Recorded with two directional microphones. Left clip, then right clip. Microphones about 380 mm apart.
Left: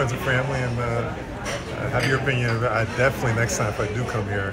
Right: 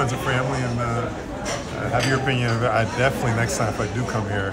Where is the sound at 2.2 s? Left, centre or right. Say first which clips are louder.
Right 1 dB; centre.